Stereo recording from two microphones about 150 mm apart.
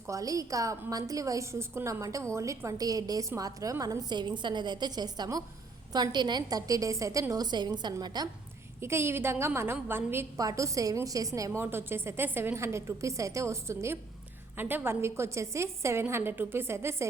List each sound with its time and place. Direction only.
0.1 s a woman's voice: 20° right (ahead or behind)